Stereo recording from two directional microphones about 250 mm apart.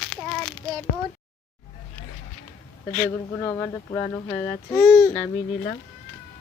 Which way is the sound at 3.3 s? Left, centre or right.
Centre.